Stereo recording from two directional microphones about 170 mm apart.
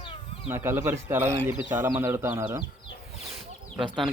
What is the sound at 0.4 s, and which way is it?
Speech, 15° right (ahead or behind).